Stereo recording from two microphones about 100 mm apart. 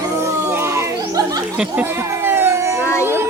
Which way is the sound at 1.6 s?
20° right (ahead or behind).